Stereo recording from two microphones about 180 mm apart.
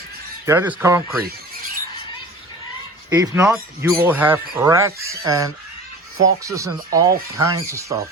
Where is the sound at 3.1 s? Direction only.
15° right (ahead or behind).